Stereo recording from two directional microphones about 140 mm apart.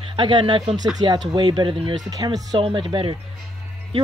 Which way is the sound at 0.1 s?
35° right (ahead or behind).